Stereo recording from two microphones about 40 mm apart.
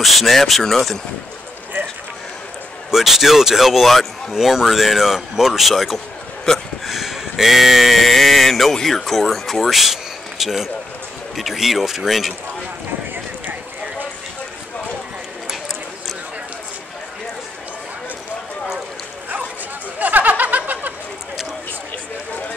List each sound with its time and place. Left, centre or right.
0.0 s speech: centre
2.9 s speech: centre
6.5 s speech: centre
6.9 s speech: centre
20.0 s a sound: right